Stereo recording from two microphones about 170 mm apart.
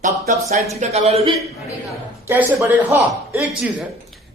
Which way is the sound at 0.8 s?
40° right (ahead or behind).